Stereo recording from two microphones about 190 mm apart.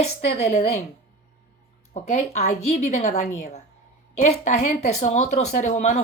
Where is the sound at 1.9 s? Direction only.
35° left (ahead or behind).